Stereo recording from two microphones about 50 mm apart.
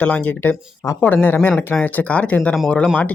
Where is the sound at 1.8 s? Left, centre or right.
Left.